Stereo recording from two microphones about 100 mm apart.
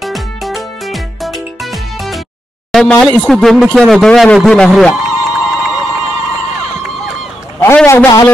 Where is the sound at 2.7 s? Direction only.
5° left (ahead or behind).